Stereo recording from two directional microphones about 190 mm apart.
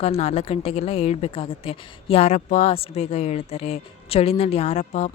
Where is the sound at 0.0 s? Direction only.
35° left (ahead or behind).